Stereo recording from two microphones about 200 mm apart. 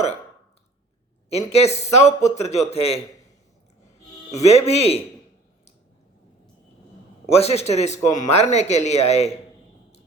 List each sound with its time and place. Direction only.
1.3 s a man's voice: 30° left (ahead or behind)
4.3 s a man's voice: 30° left (ahead or behind)
7.3 s a man's voice: 30° left (ahead or behind)